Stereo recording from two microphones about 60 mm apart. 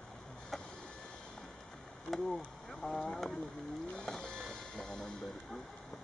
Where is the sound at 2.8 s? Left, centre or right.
Centre.